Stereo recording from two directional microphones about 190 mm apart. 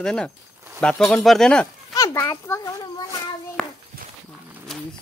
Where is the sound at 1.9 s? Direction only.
20° left (ahead or behind).